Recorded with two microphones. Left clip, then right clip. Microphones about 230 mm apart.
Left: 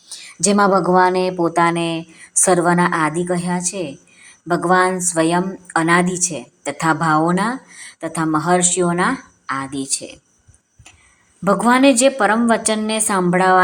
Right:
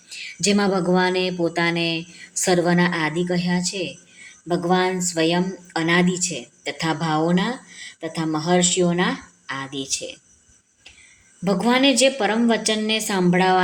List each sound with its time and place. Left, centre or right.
0.1 s a sound: centre
0.9 s a woman's voice: centre
11.4 s a woman's voice: centre